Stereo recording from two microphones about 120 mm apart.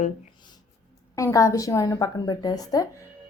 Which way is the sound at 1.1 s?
25° left (ahead or behind).